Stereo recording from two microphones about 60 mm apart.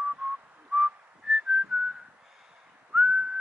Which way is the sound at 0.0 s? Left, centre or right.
Centre.